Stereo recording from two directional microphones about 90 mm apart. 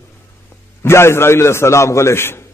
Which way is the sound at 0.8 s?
30° left (ahead or behind).